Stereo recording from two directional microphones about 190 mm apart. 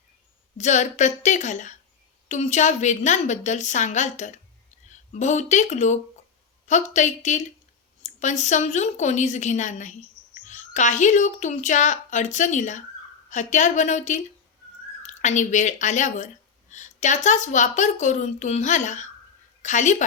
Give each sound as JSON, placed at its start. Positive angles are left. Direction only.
{"t": 0.5, "sound": "speech", "side_deg": 40}